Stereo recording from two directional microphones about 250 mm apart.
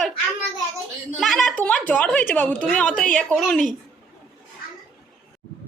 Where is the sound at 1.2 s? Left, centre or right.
Centre.